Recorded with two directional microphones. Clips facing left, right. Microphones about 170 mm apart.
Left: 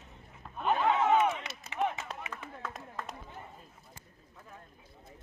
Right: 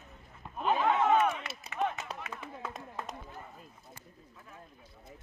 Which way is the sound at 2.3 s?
10° right (ahead or behind).